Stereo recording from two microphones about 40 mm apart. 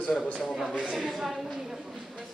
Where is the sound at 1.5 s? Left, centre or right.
Centre.